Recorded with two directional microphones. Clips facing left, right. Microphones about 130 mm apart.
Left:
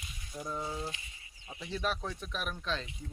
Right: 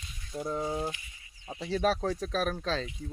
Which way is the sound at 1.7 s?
40° right (ahead or behind).